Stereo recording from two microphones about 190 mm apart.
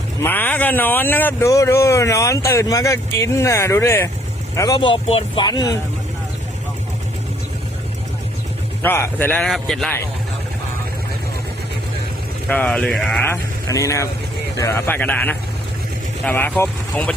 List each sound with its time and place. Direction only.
0.2 s speech: 10° left (ahead or behind)
8.8 s speech: 10° left (ahead or behind)
12.5 s speech: 5° left (ahead or behind)